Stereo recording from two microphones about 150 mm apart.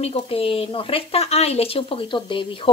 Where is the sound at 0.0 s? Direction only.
40° left (ahead or behind).